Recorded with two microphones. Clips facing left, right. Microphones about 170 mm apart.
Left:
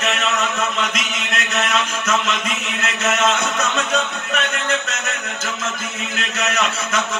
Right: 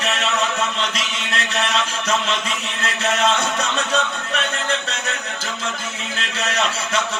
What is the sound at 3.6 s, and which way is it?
Mantra, 35° right (ahead or behind).